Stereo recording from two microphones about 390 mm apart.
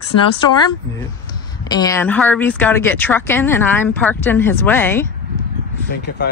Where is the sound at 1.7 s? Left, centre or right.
Centre.